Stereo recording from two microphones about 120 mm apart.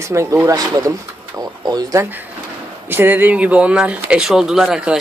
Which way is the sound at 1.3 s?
30° right (ahead or behind).